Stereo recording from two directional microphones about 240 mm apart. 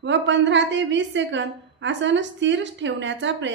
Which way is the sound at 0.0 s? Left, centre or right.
Right.